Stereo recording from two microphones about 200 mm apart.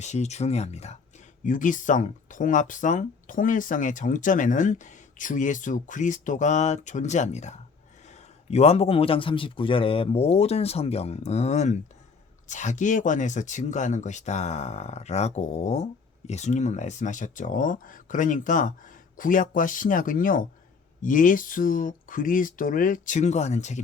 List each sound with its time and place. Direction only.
0.0 s speech: 35° left (ahead or behind)